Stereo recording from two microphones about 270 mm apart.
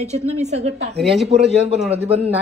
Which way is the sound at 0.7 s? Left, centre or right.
Right.